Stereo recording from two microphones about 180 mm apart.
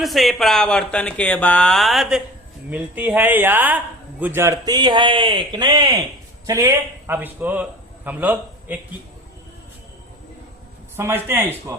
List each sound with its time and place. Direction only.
0.0 s a man's voice: centre (ahead or behind)
10.9 s speech: 15° right (ahead or behind)